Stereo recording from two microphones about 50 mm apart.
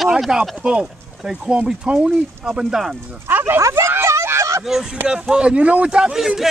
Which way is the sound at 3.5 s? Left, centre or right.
Right.